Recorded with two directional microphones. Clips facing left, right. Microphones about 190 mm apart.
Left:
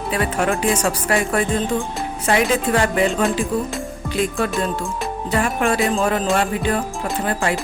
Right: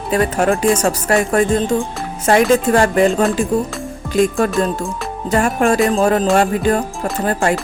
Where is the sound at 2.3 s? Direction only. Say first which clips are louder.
Right 6 dB; 45° right (ahead or behind).